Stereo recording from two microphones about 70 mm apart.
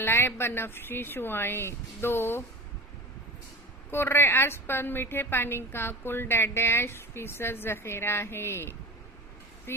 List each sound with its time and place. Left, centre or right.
0.0 s a woman's voice: left
3.9 s a woman's voice: left